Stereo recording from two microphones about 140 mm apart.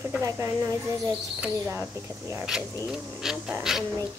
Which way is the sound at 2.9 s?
5° right (ahead or behind).